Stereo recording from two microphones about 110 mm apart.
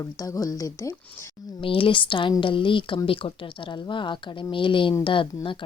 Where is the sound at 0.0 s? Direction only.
30° left (ahead or behind).